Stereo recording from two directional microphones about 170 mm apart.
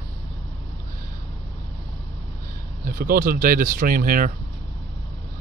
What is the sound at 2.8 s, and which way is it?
Speech, 60° right (ahead or behind).